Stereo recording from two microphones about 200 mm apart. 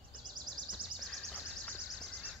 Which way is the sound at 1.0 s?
Centre (ahead or behind).